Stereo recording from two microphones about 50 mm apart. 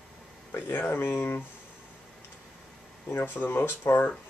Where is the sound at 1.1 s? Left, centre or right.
Left.